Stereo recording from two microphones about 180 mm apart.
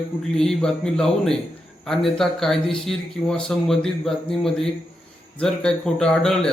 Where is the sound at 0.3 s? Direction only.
5° left (ahead or behind).